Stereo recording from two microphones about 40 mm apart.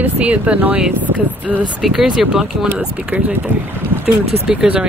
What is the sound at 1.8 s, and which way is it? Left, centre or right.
Speech, centre.